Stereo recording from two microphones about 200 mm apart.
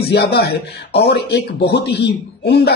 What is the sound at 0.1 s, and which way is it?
Speech, 55° left (ahead or behind).